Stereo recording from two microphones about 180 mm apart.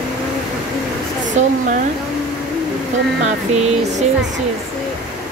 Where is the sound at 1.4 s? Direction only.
40° right (ahead or behind).